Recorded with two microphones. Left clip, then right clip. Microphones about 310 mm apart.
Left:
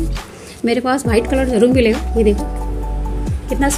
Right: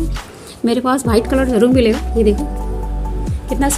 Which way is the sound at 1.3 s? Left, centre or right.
Centre.